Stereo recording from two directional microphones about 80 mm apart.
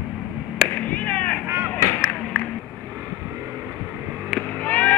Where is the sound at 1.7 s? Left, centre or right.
Left.